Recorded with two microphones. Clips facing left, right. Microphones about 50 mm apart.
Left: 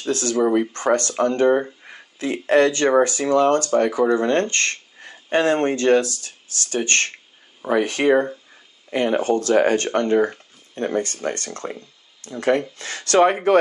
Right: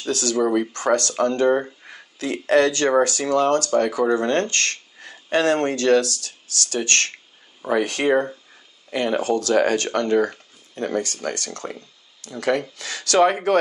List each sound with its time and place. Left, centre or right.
0.1 s speech: left
0.4 s speech: centre
0.7 s speech: left
1.5 s speech: centre
2.1 s speech: left
5.0 s a sound: left
5.3 s speech: left
10.1 s speech: centre
10.7 s speech: left